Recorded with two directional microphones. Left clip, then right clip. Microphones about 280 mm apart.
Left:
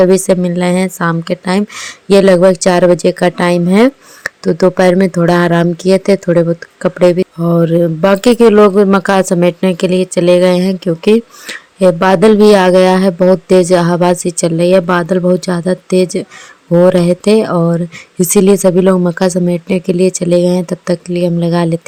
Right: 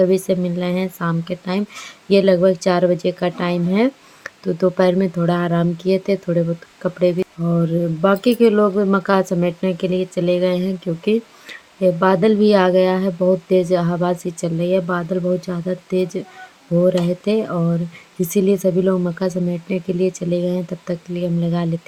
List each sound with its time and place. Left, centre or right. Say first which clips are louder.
0.0 s a woman's voice: left 8 dB; left